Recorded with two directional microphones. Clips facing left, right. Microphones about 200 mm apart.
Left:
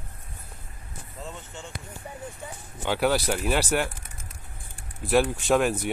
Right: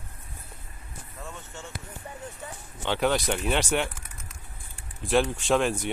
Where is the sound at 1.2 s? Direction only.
20° left (ahead or behind).